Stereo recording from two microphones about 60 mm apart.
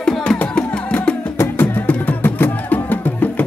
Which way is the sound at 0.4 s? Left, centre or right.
Left.